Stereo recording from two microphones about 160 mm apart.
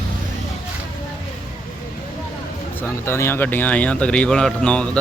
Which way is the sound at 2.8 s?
15° left (ahead or behind).